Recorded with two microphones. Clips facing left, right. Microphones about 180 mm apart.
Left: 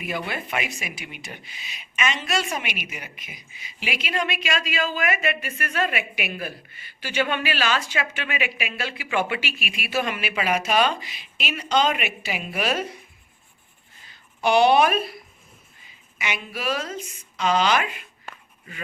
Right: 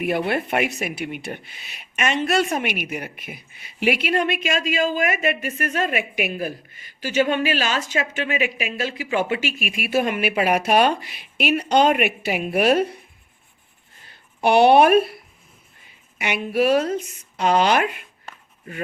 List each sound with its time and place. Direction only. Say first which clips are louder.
0.0 s speech: right 8 dB; 60° right (ahead or behind)
14.1 s speech: right 3 dB; 60° right (ahead or behind)
16.1 s speech: right 10 dB; 60° right (ahead or behind)